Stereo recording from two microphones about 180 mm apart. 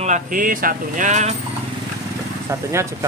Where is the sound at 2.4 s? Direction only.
15° right (ahead or behind).